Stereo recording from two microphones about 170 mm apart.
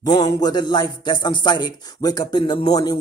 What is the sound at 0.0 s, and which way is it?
A man's voice, 25° left (ahead or behind).